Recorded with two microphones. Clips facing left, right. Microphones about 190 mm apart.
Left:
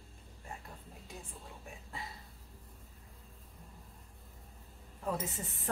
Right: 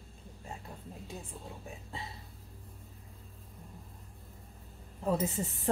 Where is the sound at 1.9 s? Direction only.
25° right (ahead or behind).